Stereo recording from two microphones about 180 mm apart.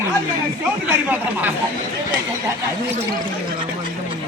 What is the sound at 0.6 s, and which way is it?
Speech, 10° right (ahead or behind).